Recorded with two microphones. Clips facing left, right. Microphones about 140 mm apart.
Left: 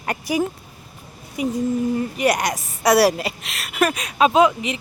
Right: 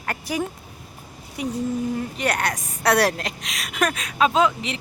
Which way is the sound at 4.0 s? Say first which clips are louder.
Left 4 dB; 20° left (ahead or behind).